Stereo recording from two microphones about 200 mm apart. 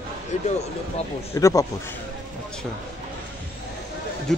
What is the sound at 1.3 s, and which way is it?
Speech, 15° left (ahead or behind).